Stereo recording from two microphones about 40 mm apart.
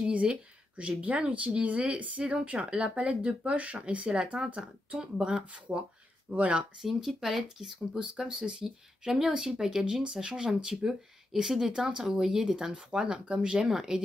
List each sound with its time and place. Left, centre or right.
0.0 s speech: right
5.7 s speech: right
6.3 s speech: right
6.8 s speech: centre; by 8.6 s right
9.0 s speech: centre
12.5 s speech: right
13.7 s speech: centre